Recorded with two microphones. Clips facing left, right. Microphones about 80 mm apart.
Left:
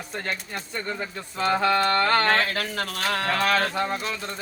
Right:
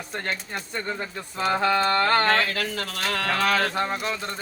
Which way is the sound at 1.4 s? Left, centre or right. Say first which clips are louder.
Left 1 dB; centre.